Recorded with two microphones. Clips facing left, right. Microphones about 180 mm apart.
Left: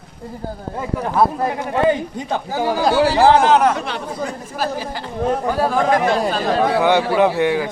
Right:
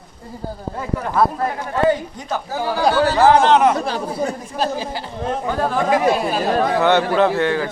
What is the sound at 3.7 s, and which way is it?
Speech, 35° right (ahead or behind).